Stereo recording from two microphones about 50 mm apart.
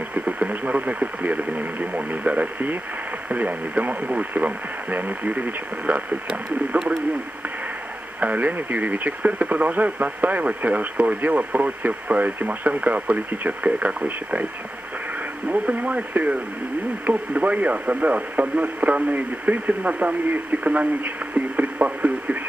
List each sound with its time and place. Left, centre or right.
0.1 s speech: right
8.2 s speech: right
15.5 s speech: right